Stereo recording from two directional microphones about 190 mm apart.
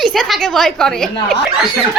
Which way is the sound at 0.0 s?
Centre (ahead or behind).